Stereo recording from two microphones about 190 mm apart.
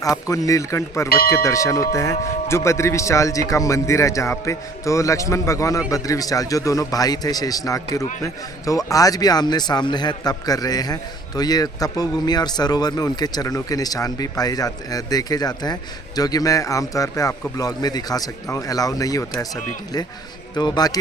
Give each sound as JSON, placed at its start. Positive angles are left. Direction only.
{"t": 0.0, "sound": "a man's voice", "side_deg": 20}
{"t": 20.6, "sound": "a man's voice", "side_deg": 20}